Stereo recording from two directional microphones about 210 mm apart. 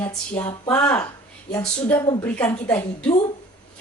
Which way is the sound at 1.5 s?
15° left (ahead or behind).